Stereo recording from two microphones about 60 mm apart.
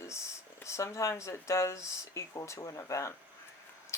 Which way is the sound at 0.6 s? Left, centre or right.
Left.